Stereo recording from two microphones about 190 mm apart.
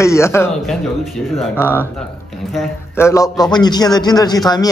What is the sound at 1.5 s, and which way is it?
Speech, 10° left (ahead or behind).